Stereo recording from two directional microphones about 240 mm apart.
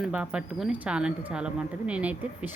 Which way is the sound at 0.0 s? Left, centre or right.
Centre.